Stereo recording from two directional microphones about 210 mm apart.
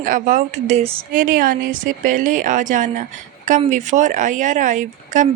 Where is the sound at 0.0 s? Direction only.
35° right (ahead or behind).